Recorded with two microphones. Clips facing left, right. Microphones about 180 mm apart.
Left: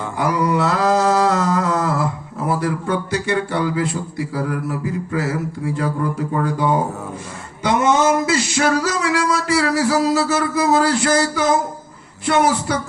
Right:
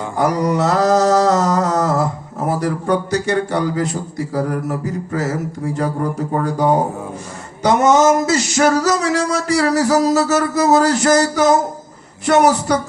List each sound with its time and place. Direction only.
0.2 s mantra: 40° right (ahead or behind)